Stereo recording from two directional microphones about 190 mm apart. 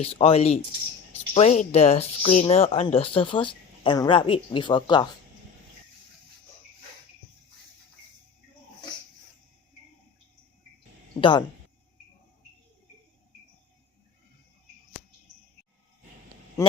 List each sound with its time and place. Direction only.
0.0 s speech: 30° left (ahead or behind)
11.2 s speech: 25° left (ahead or behind)